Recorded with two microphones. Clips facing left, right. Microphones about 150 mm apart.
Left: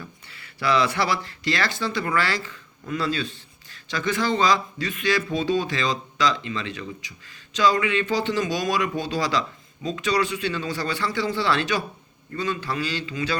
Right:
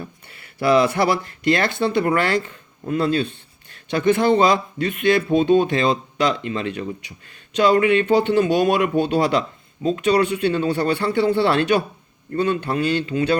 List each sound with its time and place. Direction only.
0.3 s speech: 55° right (ahead or behind)